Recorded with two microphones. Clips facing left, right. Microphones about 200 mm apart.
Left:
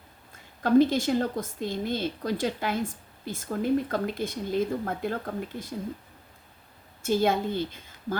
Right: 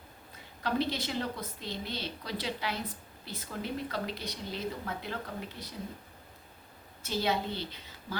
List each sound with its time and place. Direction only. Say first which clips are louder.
0.6 s speech: left 11 dB; 50° left (ahead or behind)
7.0 s a woman's voice: left 7 dB; 50° left (ahead or behind)